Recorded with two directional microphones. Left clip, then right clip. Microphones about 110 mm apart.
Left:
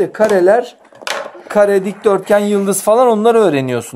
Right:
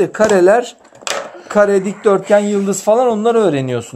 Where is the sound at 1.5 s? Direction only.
10° left (ahead or behind).